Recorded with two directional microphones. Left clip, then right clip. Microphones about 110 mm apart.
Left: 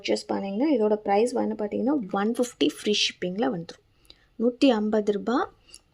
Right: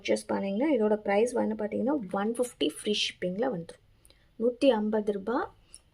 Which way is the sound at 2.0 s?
35° left (ahead or behind).